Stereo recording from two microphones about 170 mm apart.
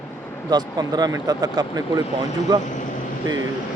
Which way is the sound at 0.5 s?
25° right (ahead or behind).